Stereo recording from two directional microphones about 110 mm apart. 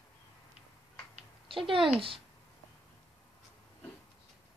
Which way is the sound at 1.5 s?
55° right (ahead or behind).